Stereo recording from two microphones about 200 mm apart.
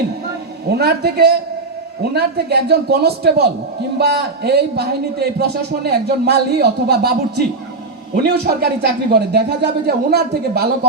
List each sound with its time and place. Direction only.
0.7 s a man's voice: 55° right (ahead or behind)